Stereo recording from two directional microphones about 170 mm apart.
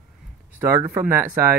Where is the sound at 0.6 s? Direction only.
10° right (ahead or behind).